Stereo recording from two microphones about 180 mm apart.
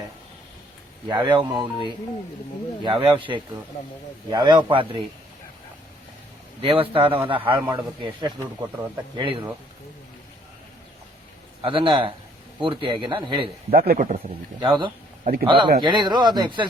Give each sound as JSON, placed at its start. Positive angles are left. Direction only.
{"t": 1.0, "sound": "a man's voice", "side_deg": -25}
{"t": 2.8, "sound": "speech", "side_deg": -30}
{"t": 4.3, "sound": "a man's voice", "side_deg": -25}
{"t": 6.6, "sound": "a man's voice", "side_deg": -30}
{"t": 11.6, "sound": "a man's voice", "side_deg": -30}
{"t": 13.7, "sound": "a man's voice", "side_deg": -50}
{"t": 14.6, "sound": "a man's voice", "side_deg": -25}
{"t": 15.2, "sound": "a man's voice", "side_deg": -55}
{"t": 15.4, "sound": "a man's voice", "side_deg": -25}